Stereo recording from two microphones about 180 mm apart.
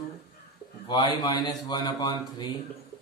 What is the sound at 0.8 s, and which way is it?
Speech, 25° left (ahead or behind).